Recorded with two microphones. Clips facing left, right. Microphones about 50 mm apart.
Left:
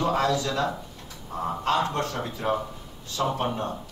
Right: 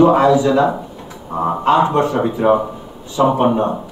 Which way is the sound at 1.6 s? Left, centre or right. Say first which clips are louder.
Right 12 dB; right.